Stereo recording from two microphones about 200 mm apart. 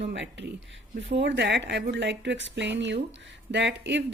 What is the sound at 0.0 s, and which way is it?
Speech, 60° right (ahead or behind).